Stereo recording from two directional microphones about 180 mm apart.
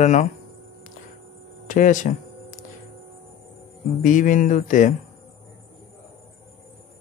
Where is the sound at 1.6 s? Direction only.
45° left (ahead or behind).